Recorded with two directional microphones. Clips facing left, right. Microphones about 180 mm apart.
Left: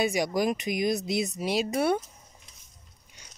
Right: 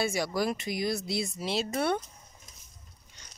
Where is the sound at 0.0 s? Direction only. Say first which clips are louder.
Left 3 dB; 15° left (ahead or behind).